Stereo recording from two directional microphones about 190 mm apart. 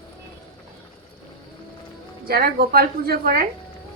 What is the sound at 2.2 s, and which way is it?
A woman's voice, 55° right (ahead or behind).